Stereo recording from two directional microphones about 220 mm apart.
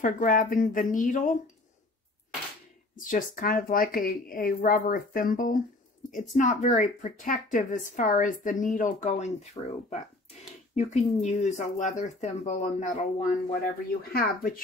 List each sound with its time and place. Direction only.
0.0 s speech: 40° left (ahead or behind)
3.0 s speech: 40° left (ahead or behind)